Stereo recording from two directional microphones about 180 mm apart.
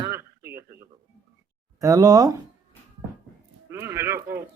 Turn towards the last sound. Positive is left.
turn(degrees=-15)  # may be behind; listen again after turning